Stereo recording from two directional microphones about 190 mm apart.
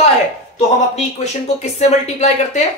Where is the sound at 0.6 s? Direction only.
35° left (ahead or behind).